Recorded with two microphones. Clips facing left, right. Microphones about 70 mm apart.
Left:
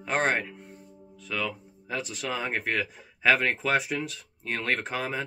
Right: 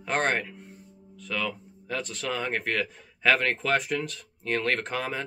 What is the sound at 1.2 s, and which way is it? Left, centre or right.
Speech, centre.